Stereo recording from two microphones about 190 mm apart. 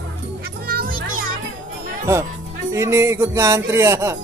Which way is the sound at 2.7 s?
15° right (ahead or behind).